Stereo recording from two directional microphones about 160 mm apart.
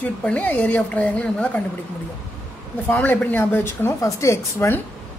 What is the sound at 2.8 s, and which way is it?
A woman's voice, 10° left (ahead or behind).